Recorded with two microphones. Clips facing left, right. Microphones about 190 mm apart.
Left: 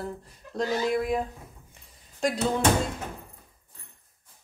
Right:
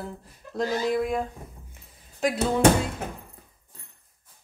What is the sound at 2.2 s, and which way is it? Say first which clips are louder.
Speech: right 1 dB; centre (ahead or behind).